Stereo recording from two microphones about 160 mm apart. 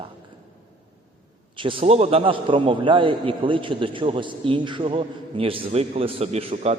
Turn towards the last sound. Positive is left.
turn(degrees=-40)  # may be behind; listen again after turning